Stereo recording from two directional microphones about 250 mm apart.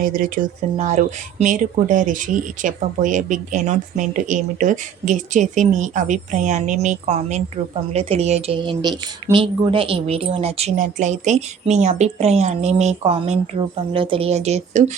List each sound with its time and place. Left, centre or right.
0.0 s speech: right